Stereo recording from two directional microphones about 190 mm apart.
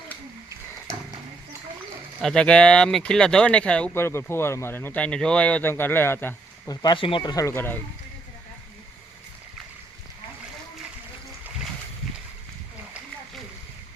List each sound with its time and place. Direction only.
2.2 s speech: 5° left (ahead or behind)
6.8 s speech: 25° left (ahead or behind)